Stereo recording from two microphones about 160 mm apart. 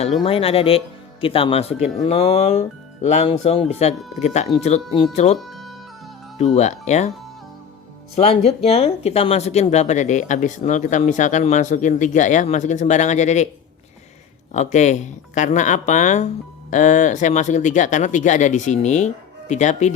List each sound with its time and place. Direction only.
0.2 s speech: 35° left (ahead or behind)
5.5 s music: centre (ahead or behind)
6.4 s speech: 45° left (ahead or behind)
8.1 s speech: 40° left (ahead or behind)
14.5 s speech: 45° left (ahead or behind)